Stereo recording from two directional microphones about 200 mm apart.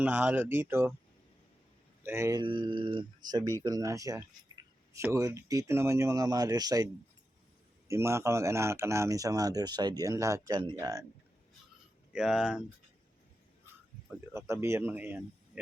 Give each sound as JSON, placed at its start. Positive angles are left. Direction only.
{"t": 0.0, "sound": "speech", "side_deg": -10}
{"t": 2.0, "sound": "speech", "side_deg": -15}
{"t": 7.9, "sound": "speech", "side_deg": -15}
{"t": 12.1, "sound": "speech", "side_deg": -5}
{"t": 14.3, "sound": "speech", "side_deg": -15}